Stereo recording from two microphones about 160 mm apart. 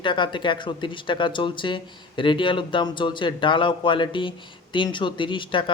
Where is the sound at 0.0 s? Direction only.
30° left (ahead or behind).